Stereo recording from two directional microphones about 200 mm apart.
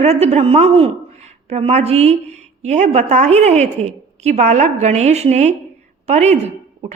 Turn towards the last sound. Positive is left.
turn(degrees=-35)  # may be behind; listen again after turning